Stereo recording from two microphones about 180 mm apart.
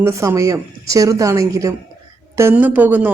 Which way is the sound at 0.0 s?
15° right (ahead or behind).